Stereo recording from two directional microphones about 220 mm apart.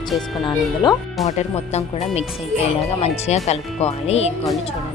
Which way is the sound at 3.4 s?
30° left (ahead or behind).